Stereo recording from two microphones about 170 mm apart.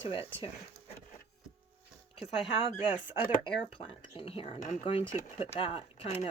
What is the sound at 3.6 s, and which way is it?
Speech, 30° left (ahead or behind).